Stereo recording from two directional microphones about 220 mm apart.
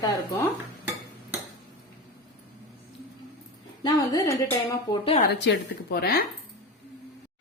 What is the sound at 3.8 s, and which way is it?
A woman's voice, 20° left (ahead or behind).